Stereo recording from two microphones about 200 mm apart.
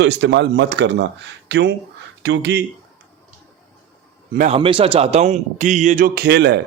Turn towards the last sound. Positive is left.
turn(degrees=-55)  # may be behind; listen again after turning